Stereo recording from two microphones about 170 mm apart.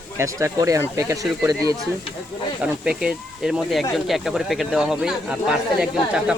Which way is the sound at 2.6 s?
5° right (ahead or behind).